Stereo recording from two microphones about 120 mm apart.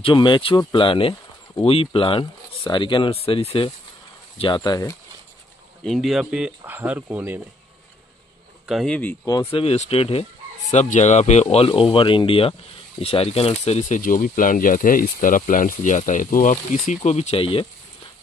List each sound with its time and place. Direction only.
0.0 s speech: 40° left (ahead or behind)
4.6 s speech: 30° left (ahead or behind)
5.9 s speech: centre (ahead or behind)
6.6 s speech: 15° right (ahead or behind)
8.6 s speech: centre (ahead or behind)
9.5 s speech: 50° left (ahead or behind)
10.7 s speech: 75° left (ahead or behind)
11.4 s speech: 50° left (ahead or behind)